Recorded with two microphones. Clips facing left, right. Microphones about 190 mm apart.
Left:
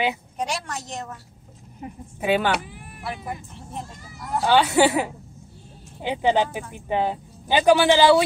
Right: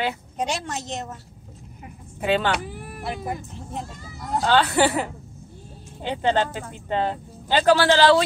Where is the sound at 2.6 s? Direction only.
40° right (ahead or behind).